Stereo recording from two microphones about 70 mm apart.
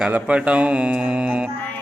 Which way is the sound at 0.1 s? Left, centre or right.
Centre.